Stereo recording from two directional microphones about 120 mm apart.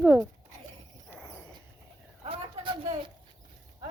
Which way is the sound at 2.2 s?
45° right (ahead or behind).